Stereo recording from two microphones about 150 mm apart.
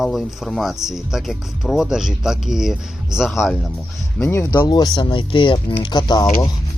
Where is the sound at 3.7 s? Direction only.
15° left (ahead or behind); by 6.3 s 30° left (ahead or behind).